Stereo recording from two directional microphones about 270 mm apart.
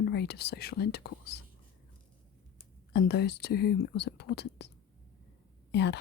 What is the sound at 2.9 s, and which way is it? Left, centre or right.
Speech, left.